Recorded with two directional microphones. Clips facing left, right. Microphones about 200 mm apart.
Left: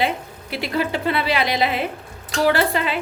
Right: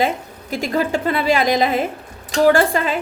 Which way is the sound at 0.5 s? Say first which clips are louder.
Right 3 dB; 45° right (ahead or behind).